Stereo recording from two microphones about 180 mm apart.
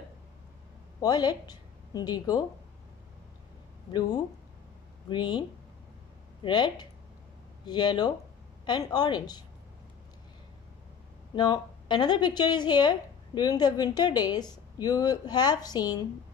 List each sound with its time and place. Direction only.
1.0 s a woman's voice: 20° left (ahead or behind)
5.1 s a woman's voice: 25° left (ahead or behind)
6.4 s a woman's voice: 25° left (ahead or behind)
11.3 s a woman's voice: 25° left (ahead or behind)